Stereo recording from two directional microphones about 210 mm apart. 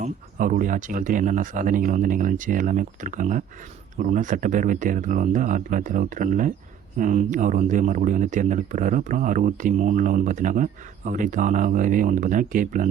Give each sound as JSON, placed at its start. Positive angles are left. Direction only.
{"t": 0.0, "sound": "speech", "side_deg": -40}